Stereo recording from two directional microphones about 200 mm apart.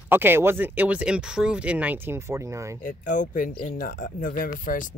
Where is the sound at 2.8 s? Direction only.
40° left (ahead or behind).